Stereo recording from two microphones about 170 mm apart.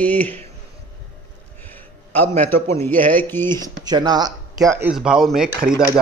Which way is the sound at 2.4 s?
10° left (ahead or behind).